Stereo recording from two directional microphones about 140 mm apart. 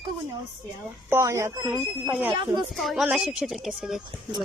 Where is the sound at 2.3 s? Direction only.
35° right (ahead or behind).